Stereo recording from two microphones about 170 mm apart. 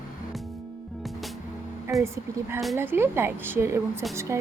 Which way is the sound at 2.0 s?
15° right (ahead or behind).